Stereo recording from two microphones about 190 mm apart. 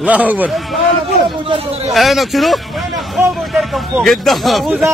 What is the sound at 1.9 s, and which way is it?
Speech, centre (ahead or behind).